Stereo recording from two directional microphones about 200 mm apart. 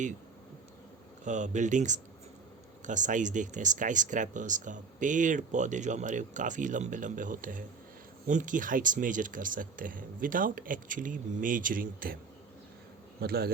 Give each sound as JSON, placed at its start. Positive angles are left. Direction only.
{"t": 1.2, "sound": "speech", "side_deg": -40}
{"t": 13.1, "sound": "a man's voice", "side_deg": -50}